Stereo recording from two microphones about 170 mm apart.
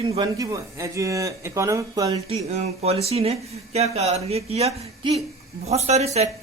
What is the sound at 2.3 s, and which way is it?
Speech, 40° right (ahead or behind).